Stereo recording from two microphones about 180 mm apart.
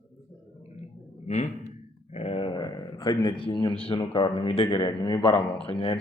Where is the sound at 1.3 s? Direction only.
40° left (ahead or behind); by 5.4 s 20° left (ahead or behind).